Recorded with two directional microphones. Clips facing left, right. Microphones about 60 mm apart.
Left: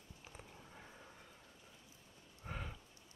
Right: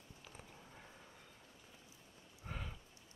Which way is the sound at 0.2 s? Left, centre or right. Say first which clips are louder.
Left 1 dB; centre.